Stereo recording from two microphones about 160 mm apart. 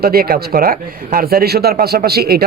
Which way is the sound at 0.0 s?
70° right (ahead or behind).